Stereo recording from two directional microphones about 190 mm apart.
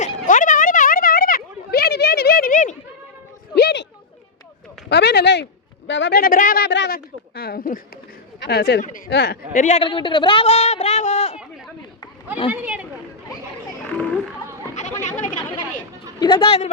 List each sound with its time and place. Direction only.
0.0 s a sound: 45° left (ahead or behind)
3.5 s a sound: 60° left (ahead or behind)
4.9 s a sound: 60° left (ahead or behind)
5.9 s a woman's voice: 65° left (ahead or behind)
9.5 s speech: 40° left (ahead or behind)
9.8 s speech: 25° left (ahead or behind)
12.5 s speech: 10° right (ahead or behind)
13.9 s children playing: 5° left (ahead or behind)
16.2 s speech: 25° left (ahead or behind)